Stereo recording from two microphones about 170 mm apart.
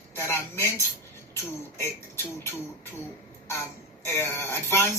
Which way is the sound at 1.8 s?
15° left (ahead or behind).